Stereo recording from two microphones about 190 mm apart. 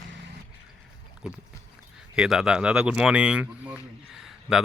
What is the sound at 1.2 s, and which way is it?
Speech, 5° right (ahead or behind).